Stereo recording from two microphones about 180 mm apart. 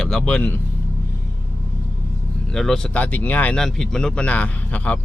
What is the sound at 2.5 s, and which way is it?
Speech, 5° left (ahead or behind).